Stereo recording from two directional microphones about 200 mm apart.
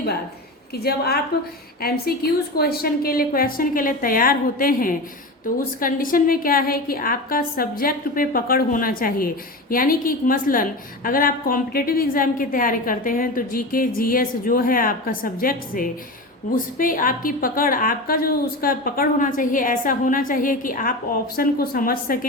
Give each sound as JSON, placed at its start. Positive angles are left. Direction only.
{"t": 0.8, "sound": "a woman's voice", "side_deg": 50}